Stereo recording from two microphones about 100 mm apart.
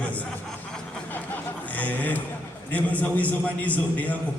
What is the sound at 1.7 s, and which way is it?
A man's voice, 15° left (ahead or behind).